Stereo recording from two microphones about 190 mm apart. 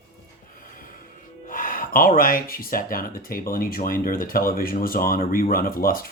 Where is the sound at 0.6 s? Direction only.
45° left (ahead or behind).